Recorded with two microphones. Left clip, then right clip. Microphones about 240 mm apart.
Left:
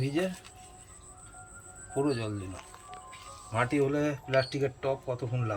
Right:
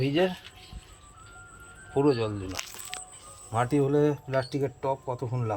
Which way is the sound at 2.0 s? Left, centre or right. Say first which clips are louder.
Right 6 dB; centre.